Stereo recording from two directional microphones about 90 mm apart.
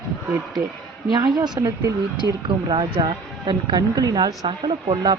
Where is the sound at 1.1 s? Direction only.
50° right (ahead or behind).